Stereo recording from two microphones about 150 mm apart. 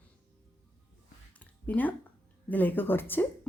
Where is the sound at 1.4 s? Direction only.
10° left (ahead or behind).